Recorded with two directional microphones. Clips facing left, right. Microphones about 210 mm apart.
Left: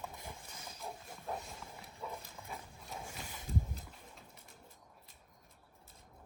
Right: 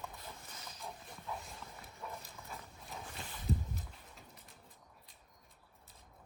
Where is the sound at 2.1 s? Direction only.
Centre (ahead or behind).